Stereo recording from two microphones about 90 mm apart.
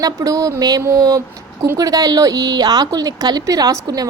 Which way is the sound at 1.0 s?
40° right (ahead or behind).